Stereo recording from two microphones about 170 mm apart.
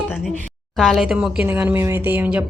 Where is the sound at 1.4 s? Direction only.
15° right (ahead or behind).